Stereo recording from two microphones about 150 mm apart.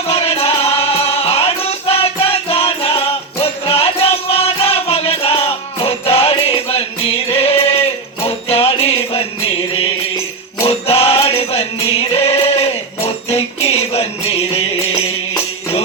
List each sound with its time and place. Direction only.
0.1 s music: 40° left (ahead or behind)
2.5 s music: 40° left (ahead or behind)